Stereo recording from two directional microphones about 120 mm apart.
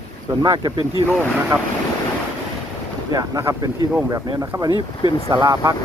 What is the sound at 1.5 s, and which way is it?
Speech, 25° right (ahead or behind).